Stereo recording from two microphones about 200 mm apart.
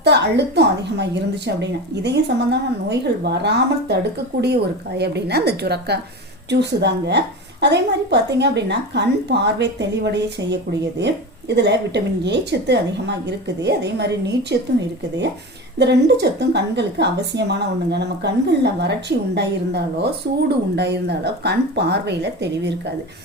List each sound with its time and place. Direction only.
0.0 s a woman's voice: 55° right (ahead or behind)
15.8 s a woman's voice: 60° right (ahead or behind)